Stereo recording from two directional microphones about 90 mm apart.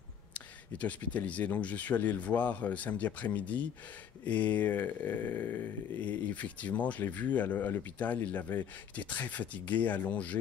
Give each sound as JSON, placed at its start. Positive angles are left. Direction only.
{"t": 0.3, "sound": "speech", "side_deg": 15}